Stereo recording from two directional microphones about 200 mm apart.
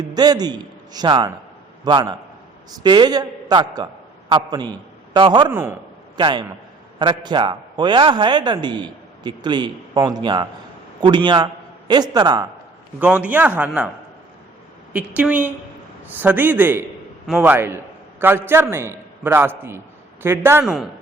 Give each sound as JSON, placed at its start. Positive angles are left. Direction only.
{"t": 0.0, "sound": "a man's voice", "side_deg": -20}
{"t": 5.5, "sound": "a man's voice", "side_deg": -10}
{"t": 6.1, "sound": "a man's voice", "side_deg": -25}
{"t": 13.0, "sound": "a man's voice", "side_deg": -5}
{"t": 14.9, "sound": "a man's voice", "side_deg": -5}